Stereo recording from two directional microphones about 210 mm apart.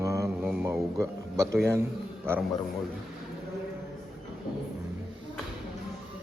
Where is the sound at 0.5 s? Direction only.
10° right (ahead or behind).